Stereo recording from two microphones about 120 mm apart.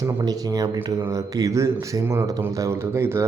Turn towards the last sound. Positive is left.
turn(degrees=-20)  # may be behind; listen again after turning